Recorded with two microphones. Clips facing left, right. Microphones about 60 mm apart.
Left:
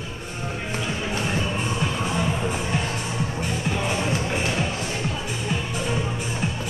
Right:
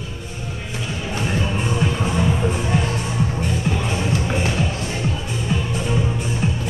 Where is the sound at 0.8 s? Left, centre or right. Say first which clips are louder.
Right 2 dB; centre.